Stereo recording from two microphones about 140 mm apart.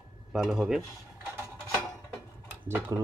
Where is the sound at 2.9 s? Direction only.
25° right (ahead or behind).